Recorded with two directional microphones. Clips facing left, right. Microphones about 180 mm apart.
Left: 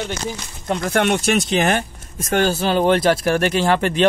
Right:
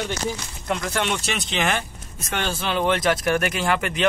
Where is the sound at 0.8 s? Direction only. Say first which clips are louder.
Left 11 dB; 50° left (ahead or behind); by 4.0 s 30° left (ahead or behind).